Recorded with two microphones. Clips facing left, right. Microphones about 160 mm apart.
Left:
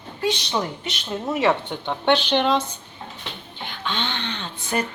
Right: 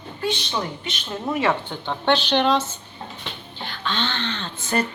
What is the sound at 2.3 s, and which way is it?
Speech, 5° left (ahead or behind).